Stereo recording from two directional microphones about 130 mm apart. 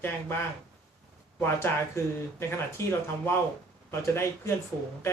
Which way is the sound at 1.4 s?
20° left (ahead or behind).